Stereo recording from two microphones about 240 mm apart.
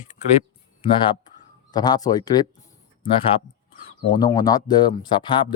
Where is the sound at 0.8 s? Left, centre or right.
Centre.